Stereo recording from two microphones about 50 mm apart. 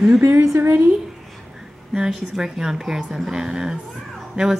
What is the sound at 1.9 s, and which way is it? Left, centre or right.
A woman's voice, centre.